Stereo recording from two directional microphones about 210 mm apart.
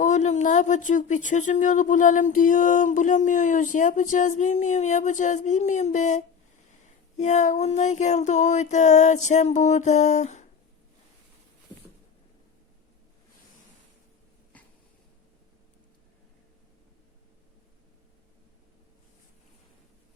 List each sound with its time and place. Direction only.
0.0 s speech: 35° left (ahead or behind)